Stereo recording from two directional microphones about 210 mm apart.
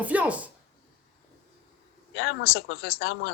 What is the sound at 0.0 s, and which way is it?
Speech, 5° right (ahead or behind).